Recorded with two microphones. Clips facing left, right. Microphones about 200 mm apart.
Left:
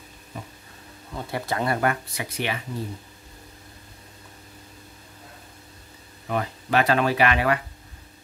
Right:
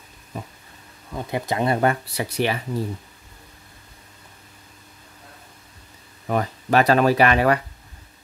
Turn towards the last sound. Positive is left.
turn(degrees=-40)  # may be behind; listen again after turning